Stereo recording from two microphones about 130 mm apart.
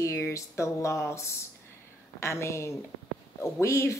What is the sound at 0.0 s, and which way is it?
Speech, 25° left (ahead or behind).